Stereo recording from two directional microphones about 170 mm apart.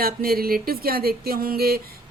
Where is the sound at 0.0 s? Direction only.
60° right (ahead or behind).